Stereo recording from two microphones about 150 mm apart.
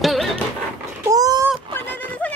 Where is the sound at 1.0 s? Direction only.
25° right (ahead or behind).